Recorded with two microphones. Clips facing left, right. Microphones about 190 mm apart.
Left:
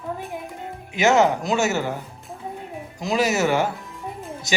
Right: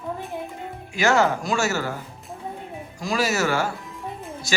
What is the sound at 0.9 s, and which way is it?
A man's voice, 20° left (ahead or behind).